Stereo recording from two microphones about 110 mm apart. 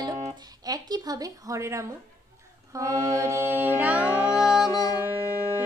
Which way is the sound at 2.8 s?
25° right (ahead or behind).